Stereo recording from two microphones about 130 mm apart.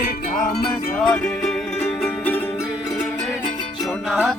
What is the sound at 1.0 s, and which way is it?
Music, 5° left (ahead or behind).